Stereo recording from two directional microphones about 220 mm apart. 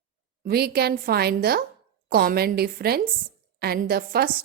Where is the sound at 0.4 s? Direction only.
45° right (ahead or behind).